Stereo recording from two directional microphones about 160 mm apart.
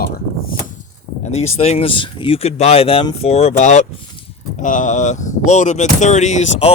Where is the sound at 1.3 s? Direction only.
40° left (ahead or behind).